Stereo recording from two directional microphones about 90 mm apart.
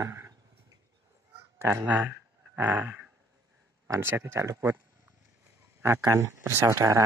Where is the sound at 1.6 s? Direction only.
30° right (ahead or behind).